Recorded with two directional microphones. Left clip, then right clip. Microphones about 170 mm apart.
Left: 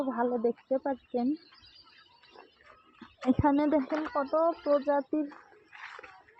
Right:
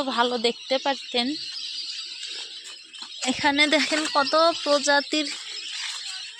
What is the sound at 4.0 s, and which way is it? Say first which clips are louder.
Speech: right 9 dB; 70° right (ahead or behind).